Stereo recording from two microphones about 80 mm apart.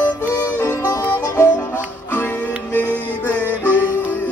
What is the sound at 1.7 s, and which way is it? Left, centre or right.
Music, left.